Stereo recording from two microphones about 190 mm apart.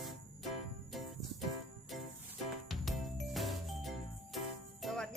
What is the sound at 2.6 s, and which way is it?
Music, centre (ahead or behind).